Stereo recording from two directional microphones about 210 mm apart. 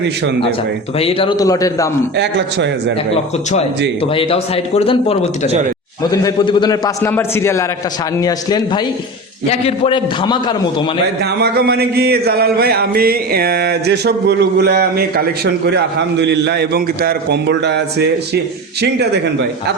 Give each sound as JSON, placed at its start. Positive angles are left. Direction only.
{"t": 0.9, "sound": "a man's voice", "side_deg": 25}
{"t": 2.1, "sound": "a man's voice", "side_deg": -55}
{"t": 4.1, "sound": "speech", "side_deg": 25}
{"t": 6.0, "sound": "a man's voice", "side_deg": 15}
{"t": 11.2, "sound": "speech", "side_deg": -50}